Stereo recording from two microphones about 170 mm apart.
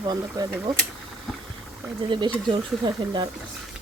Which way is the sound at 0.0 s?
25° right (ahead or behind).